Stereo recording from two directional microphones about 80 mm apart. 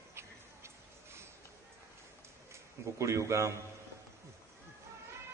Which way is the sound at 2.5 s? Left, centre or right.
Right.